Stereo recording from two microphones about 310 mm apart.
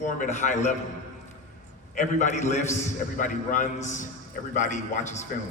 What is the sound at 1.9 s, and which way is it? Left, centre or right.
A man's voice, left.